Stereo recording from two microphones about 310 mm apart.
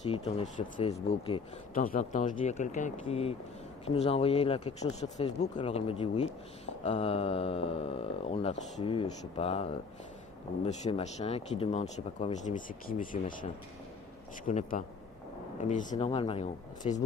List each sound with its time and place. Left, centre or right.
0.1 s speech: centre
10.7 s speech: left